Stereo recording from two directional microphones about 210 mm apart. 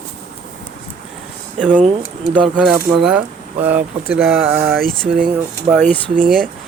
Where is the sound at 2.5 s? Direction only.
5° right (ahead or behind).